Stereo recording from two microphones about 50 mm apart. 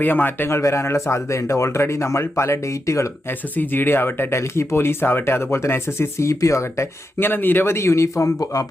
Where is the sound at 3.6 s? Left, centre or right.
Left.